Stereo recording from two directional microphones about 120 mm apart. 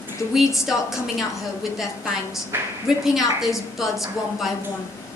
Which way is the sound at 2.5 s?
20° right (ahead or behind).